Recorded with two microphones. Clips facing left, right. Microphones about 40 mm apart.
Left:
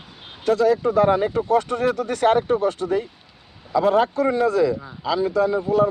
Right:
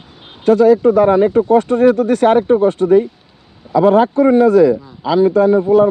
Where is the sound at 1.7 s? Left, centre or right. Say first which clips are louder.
Right 10 dB; right.